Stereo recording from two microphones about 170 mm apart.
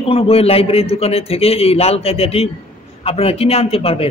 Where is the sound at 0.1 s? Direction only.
35° left (ahead or behind).